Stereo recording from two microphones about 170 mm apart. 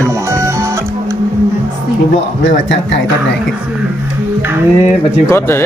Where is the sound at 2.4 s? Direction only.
90° left.